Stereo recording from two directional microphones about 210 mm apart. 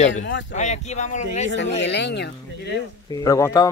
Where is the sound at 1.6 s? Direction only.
55° left (ahead or behind).